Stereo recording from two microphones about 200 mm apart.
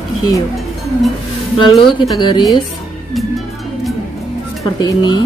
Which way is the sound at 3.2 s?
Centre (ahead or behind).